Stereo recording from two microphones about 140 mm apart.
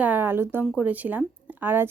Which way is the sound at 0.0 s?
15° right (ahead or behind).